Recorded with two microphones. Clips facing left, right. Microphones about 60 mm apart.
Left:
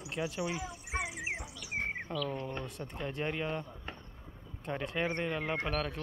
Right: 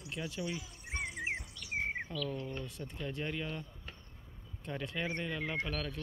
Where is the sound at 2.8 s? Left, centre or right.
Left.